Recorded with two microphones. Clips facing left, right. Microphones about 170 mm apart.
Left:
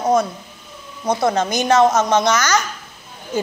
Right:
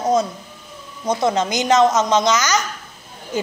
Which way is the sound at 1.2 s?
20° right (ahead or behind).